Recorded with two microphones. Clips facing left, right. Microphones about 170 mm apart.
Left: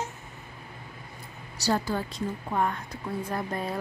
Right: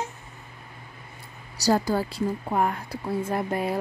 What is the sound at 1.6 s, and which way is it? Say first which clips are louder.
A woman's voice: right 5 dB; 40° right (ahead or behind).